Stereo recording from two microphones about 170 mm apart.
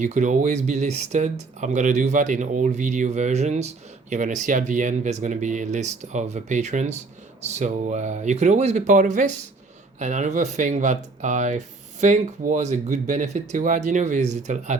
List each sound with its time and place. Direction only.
0.0 s speech: 45° right (ahead or behind)